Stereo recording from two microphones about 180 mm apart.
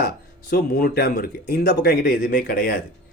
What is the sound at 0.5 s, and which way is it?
Speech, 55° left (ahead or behind).